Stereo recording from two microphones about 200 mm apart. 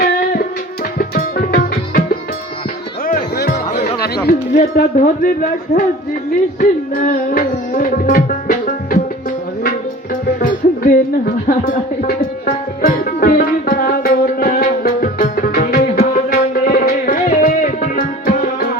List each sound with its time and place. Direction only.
0.9 s music: 45° left (ahead or behind)
3.1 s music: 55° left (ahead or behind)
10.4 s speech: 45° left (ahead or behind)
12.5 s music: 45° left (ahead or behind)